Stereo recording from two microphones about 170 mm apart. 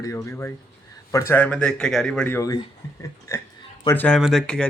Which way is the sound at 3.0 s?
15° left (ahead or behind).